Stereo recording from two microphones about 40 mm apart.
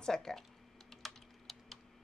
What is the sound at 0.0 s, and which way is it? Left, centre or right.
Typing, centre.